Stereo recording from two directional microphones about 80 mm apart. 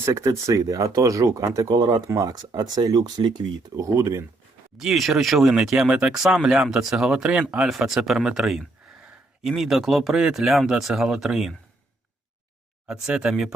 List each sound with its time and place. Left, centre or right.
0.0 s speech: right
3.8 s speech: right
4.8 s speech: centre
12.9 s speech: centre